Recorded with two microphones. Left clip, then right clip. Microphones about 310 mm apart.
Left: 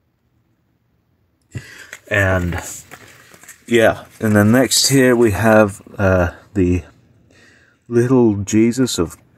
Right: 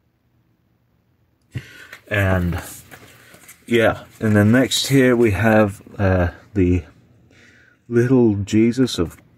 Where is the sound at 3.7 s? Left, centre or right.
Left.